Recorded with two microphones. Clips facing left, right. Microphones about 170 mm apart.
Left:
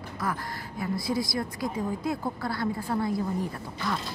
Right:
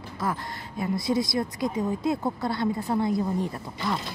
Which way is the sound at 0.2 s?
25° right (ahead or behind).